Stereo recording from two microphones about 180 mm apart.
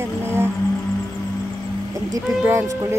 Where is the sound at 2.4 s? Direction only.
15° right (ahead or behind).